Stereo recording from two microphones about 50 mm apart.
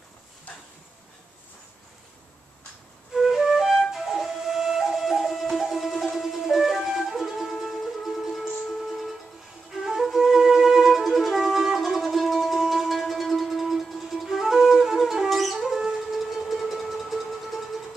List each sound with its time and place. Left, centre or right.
0.5 s a sound: left
3.2 s flute: centre
9.8 s music: centre